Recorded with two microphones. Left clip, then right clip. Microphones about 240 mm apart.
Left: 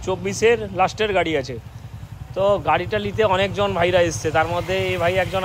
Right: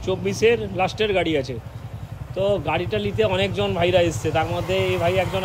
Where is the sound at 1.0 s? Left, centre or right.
Left.